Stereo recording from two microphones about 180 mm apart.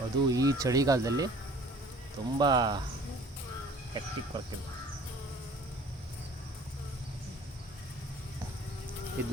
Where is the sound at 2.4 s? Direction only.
20° right (ahead or behind).